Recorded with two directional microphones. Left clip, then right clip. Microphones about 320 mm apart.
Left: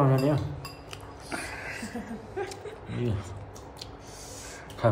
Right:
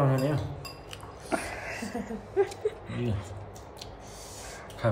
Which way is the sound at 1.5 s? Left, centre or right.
Right.